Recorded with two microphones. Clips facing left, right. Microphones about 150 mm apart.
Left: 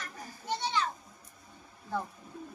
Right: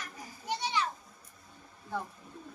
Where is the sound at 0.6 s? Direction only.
10° right (ahead or behind).